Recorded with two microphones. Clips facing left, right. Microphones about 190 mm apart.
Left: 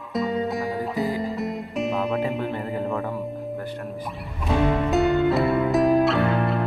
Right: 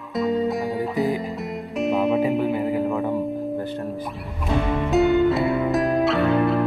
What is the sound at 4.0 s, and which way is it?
Music, centre (ahead or behind).